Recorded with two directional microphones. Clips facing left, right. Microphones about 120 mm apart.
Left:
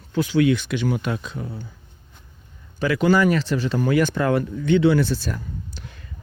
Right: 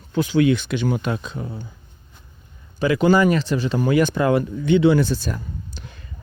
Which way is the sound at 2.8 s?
20° right (ahead or behind).